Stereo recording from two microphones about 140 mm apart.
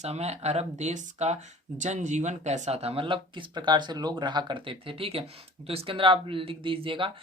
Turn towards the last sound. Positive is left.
turn(degrees=-40)  # may be behind; listen again after turning